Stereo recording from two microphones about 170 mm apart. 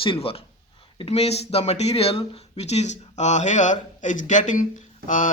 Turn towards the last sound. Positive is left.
turn(degrees=50)  # may be behind; listen again after turning